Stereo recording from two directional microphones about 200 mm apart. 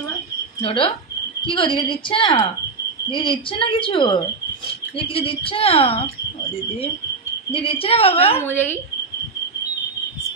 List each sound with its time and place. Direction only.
0.6 s a woman's voice: 25° left (ahead or behind)
7.5 s a woman's voice: 30° left (ahead or behind)
8.4 s speech: 10° left (ahead or behind)